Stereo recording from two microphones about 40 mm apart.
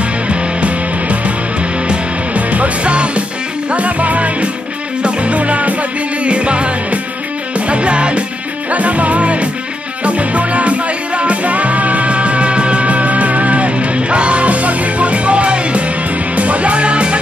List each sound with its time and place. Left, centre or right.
0.3 s music: right